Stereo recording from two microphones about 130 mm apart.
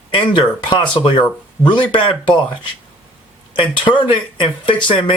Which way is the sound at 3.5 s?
40° left (ahead or behind).